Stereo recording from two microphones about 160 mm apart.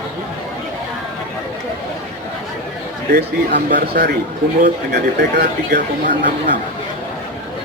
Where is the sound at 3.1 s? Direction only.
90° right.